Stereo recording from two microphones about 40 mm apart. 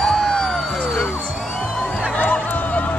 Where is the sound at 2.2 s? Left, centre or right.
Left.